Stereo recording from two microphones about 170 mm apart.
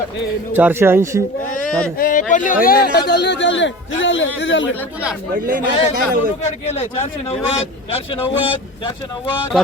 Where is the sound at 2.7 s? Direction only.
65° left (ahead or behind).